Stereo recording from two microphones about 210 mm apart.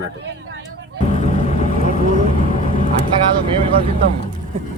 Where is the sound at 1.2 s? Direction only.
35° left (ahead or behind).